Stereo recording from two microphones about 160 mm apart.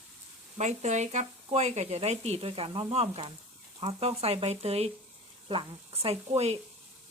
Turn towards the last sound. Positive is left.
turn(degrees=-40)  # may be behind; listen again after turning